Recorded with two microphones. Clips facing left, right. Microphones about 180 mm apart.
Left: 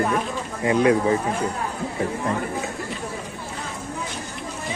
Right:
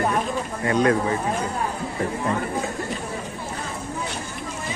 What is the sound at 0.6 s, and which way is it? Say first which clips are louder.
Speech: left 2 dB; 10° left (ahead or behind).